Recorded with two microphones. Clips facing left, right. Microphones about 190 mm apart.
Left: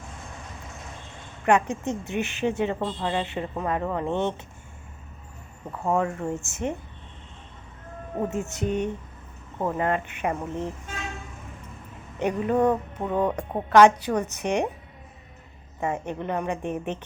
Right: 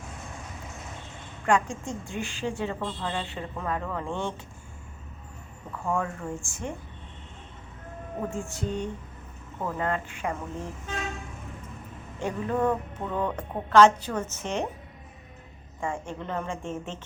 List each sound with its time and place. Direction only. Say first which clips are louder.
1.5 s a woman's voice: left 4 dB; 20° left (ahead or behind)
5.7 s speech: left 4 dB; 35° left (ahead or behind)
6.0 s a woman's voice: left 5 dB; 20° left (ahead or behind)
8.3 s a woman's voice: left 5 dB; 20° left (ahead or behind)
12.2 s music: left 5 dB; 15° left (ahead or behind)
15.8 s a woman's voice: left 4 dB; 20° left (ahead or behind)